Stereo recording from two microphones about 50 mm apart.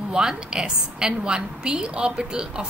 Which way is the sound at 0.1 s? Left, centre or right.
Centre.